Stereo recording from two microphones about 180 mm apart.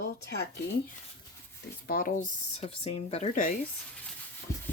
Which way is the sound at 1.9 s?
50° left (ahead or behind).